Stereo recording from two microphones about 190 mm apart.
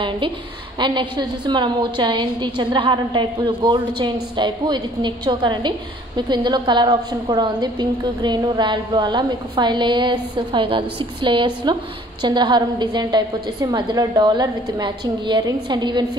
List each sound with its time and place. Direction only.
0.7 s a woman's voice: 25° right (ahead or behind)